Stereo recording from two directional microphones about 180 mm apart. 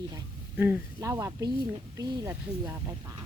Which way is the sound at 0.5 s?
10° right (ahead or behind).